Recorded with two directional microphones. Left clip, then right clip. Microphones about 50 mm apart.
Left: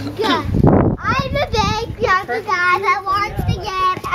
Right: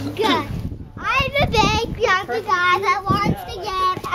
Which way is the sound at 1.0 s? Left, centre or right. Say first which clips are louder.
Even; right.